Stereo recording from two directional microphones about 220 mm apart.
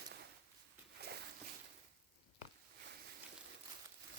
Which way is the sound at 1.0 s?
45° right (ahead or behind).